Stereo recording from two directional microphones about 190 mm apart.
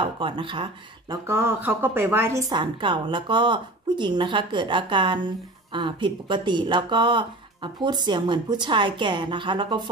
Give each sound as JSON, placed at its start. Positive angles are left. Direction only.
{"t": 0.0, "sound": "speech", "side_deg": -25}
{"t": 1.1, "sound": "speech", "side_deg": -10}
{"t": 2.5, "sound": "speech", "side_deg": -25}